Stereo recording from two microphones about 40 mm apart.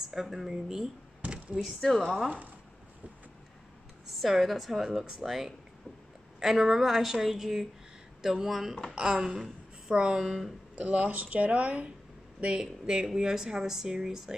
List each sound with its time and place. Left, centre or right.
0.1 s speech: centre
1.8 s a woman's voice: centre
4.1 s a woman's voice: centre
4.8 s speech: centre
8.9 s speech: centre
10.8 s speech: right
12.8 s speech: centre